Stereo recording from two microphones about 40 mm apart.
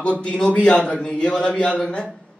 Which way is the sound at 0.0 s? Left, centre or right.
Left.